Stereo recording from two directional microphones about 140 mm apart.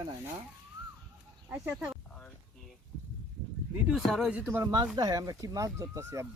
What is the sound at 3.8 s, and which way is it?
Speech, 5° right (ahead or behind).